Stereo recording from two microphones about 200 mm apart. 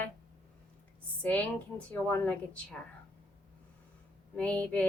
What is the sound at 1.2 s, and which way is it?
Speech, 10° left (ahead or behind).